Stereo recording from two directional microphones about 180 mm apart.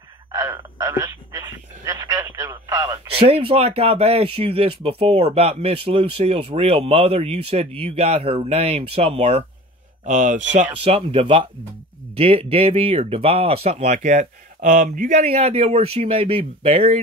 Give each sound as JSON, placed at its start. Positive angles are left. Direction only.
{"t": 0.3, "sound": "a sound", "side_deg": -15}
{"t": 2.7, "sound": "radio", "side_deg": -15}
{"t": 3.2, "sound": "speech", "side_deg": -30}
{"t": 10.0, "sound": "speech", "side_deg": -45}
{"t": 10.8, "sound": "speech", "side_deg": -30}